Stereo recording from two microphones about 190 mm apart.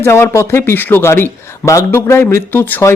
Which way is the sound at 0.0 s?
15° left (ahead or behind).